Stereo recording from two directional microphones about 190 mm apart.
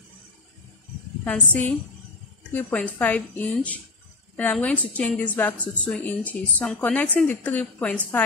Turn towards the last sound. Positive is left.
turn(degrees=5)  # may be behind; listen again after turning